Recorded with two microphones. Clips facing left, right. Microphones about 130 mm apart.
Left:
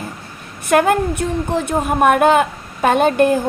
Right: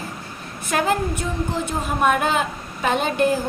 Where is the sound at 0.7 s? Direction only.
60° left (ahead or behind).